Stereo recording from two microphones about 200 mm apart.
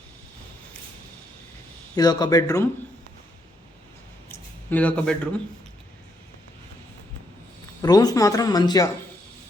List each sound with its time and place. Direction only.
2.0 s speech: 20° left (ahead or behind)
4.3 s a sound: 10° left (ahead or behind)
7.8 s a woman's voice: 20° left (ahead or behind)